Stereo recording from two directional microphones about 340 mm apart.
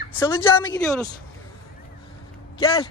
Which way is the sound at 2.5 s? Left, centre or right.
Centre.